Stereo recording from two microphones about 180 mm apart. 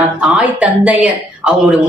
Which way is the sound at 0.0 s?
5° right (ahead or behind).